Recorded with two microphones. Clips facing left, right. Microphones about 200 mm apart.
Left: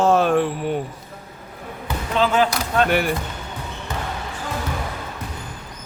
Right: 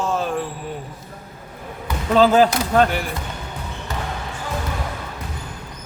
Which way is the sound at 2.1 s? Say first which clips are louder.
Right 5 dB; 35° right (ahead or behind).